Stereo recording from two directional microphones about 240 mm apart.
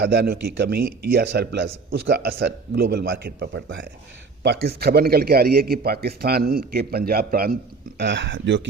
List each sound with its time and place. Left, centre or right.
0.0 s a man's voice: right